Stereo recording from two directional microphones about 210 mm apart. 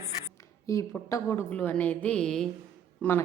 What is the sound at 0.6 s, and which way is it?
A woman's voice, 15° left (ahead or behind).